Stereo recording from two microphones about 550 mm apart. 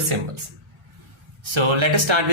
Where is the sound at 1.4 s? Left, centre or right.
Right.